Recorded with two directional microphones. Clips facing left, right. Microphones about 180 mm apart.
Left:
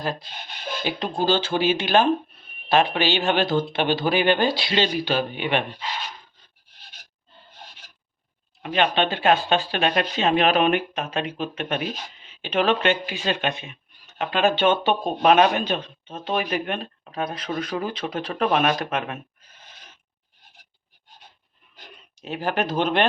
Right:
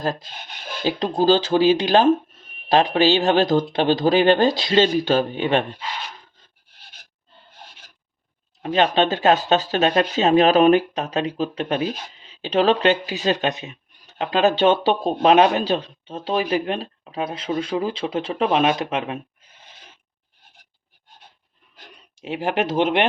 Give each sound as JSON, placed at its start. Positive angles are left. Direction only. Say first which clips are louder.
{"t": 0.0, "sound": "speech", "louder": "right 3 dB", "side_deg": -45}
{"t": 0.9, "sound": "speech", "louder": "right 6 dB", "side_deg": -35}
{"t": 8.6, "sound": "speech", "louder": "right 3 dB", "side_deg": -40}
{"t": 18.8, "sound": "a sound", "louder": "right 3 dB", "side_deg": -25}
{"t": 22.2, "sound": "speech", "louder": "right 3 dB", "side_deg": -25}